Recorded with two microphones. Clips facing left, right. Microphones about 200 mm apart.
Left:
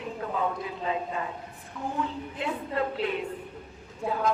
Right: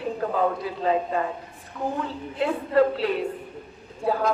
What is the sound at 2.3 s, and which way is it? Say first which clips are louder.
Speech: right 10 dB; 40° right (ahead or behind).